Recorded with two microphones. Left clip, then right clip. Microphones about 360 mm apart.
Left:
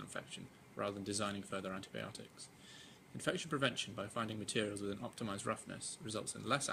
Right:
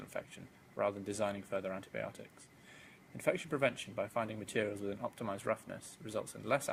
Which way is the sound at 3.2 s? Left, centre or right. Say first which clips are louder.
Right 4 dB; centre.